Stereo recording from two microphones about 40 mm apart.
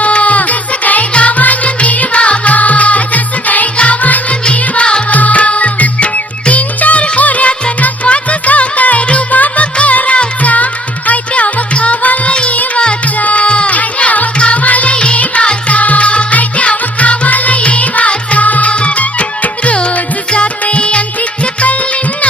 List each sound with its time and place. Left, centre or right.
0.0 s music: left
5.1 s music: left
12.3 s music: left
13.1 s music: left
13.7 s music: left
14.9 s music: left